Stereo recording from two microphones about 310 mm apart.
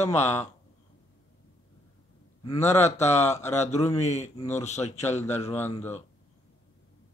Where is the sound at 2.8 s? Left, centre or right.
Left.